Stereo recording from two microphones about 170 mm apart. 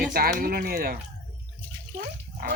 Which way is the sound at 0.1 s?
60° right (ahead or behind).